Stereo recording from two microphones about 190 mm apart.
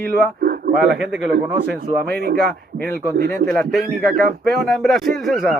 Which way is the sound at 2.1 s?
60° right (ahead or behind).